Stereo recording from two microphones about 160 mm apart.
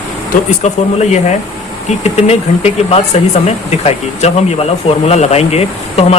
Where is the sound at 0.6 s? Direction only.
45° left (ahead or behind).